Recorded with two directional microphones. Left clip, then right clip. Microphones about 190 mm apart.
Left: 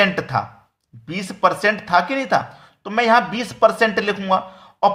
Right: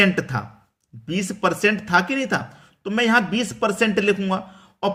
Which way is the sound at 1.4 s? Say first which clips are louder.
Left 4 dB; 30° right (ahead or behind).